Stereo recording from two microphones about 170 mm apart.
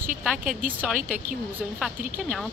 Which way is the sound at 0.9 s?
50° right (ahead or behind).